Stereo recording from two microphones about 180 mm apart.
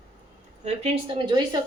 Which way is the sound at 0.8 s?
30° right (ahead or behind).